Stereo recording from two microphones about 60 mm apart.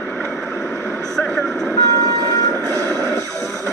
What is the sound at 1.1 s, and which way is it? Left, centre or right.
Speech, centre.